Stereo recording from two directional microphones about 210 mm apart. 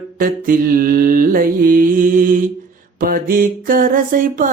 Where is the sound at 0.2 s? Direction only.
40° right (ahead or behind).